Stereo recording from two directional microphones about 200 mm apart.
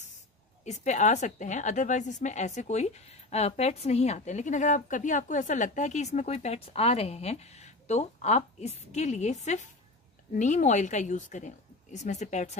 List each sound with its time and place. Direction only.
0.7 s a woman's voice: 35° left (ahead or behind)